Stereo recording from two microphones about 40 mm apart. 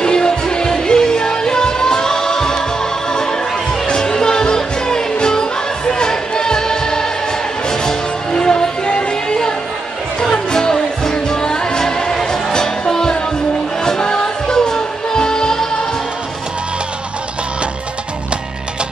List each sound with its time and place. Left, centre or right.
0.0 s music: centre